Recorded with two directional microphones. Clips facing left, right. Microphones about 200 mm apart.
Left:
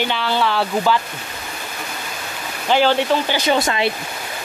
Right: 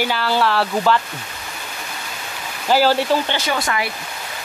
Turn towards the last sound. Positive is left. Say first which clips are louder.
# left 4 dB
turn(degrees=25)  # may be behind; listen again after turning